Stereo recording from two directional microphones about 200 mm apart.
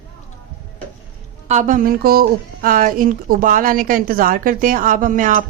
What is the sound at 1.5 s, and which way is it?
Speech, 40° right (ahead or behind).